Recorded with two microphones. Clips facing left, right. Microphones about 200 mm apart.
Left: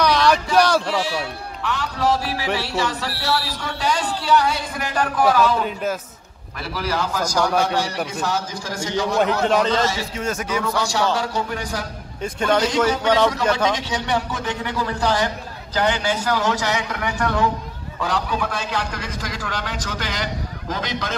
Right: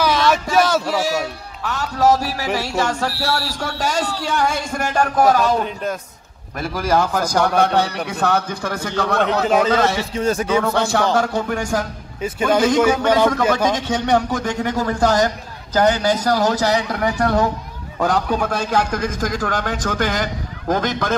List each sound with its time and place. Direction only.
0.0 s a sound: centre (ahead or behind)
1.6 s a man's voice: 45° right (ahead or behind)
6.7 s a man's voice: 50° right (ahead or behind)
10.1 s speech: 30° right (ahead or behind)
10.8 s a man's voice: 55° right (ahead or behind)